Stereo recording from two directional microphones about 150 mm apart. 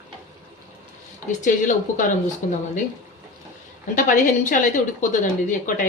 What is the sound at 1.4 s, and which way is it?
Speech, 60° left (ahead or behind).